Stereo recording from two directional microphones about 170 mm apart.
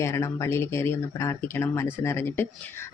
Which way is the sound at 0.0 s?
15° left (ahead or behind).